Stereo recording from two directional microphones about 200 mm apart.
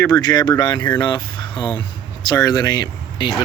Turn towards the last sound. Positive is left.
turn(degrees=20)  # may be behind; listen again after turning